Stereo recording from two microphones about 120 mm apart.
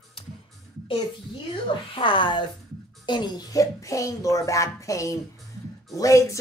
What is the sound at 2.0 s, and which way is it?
A child's voice, 45° left (ahead or behind).